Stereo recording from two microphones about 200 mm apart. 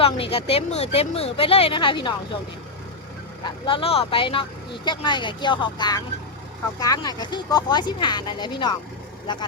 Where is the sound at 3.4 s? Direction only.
25° left (ahead or behind).